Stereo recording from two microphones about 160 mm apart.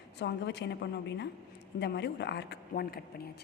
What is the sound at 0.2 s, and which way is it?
A woman's voice, 90° left.